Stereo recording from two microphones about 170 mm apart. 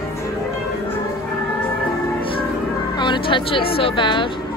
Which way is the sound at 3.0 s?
30° left (ahead or behind).